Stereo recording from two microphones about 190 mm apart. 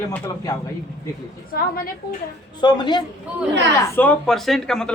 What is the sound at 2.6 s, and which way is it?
Speech, 25° left (ahead or behind).